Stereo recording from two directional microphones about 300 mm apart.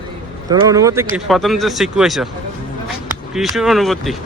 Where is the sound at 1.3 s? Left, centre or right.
Centre.